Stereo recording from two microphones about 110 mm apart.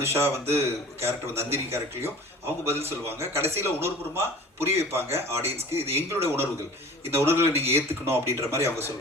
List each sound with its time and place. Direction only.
0.0 s a man's voice: 20° right (ahead or behind)